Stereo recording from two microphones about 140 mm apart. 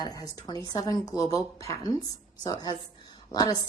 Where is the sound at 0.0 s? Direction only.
25° left (ahead or behind).